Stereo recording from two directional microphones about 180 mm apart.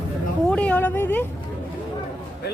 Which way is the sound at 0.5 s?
5° left (ahead or behind).